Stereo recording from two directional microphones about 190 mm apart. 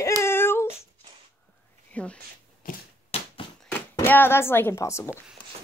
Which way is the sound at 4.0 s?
10° left (ahead or behind).